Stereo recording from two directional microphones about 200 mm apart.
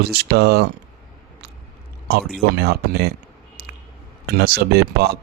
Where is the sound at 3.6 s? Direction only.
50° right (ahead or behind).